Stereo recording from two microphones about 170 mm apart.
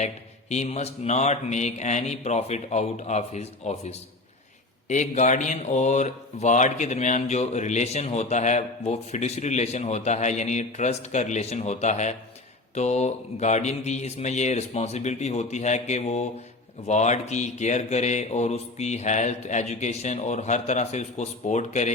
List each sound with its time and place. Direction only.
0.0 s speech: 40° left (ahead or behind)